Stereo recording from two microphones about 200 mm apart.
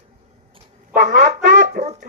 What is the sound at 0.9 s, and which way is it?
Speech, 45° right (ahead or behind).